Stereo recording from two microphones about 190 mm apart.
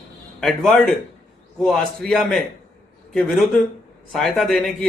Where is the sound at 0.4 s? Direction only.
Centre (ahead or behind).